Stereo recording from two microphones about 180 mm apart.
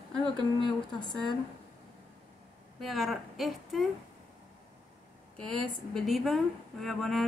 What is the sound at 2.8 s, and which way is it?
A woman's voice, centre (ahead or behind).